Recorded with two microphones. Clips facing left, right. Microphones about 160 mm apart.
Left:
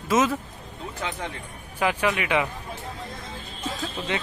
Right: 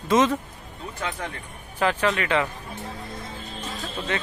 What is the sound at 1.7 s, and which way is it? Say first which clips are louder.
Speech: right 1 dB; 10° left (ahead or behind).